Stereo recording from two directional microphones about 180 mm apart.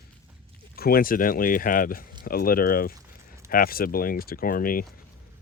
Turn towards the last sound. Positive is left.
turn(degrees=50)  # may be behind; listen again after turning